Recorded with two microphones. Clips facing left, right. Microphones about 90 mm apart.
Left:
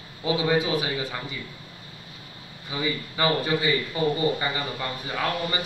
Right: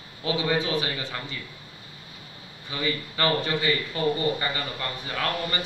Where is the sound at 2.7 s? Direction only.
10° left (ahead or behind).